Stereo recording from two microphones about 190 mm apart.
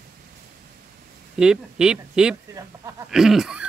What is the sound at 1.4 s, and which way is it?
Speech, 5° right (ahead or behind).